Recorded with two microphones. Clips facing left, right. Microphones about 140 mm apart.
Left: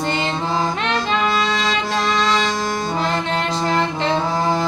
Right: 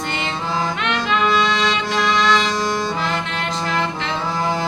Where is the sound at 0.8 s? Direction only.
30° left (ahead or behind).